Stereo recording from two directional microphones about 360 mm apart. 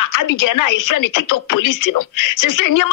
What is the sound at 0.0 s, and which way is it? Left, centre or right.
A woman's voice, left.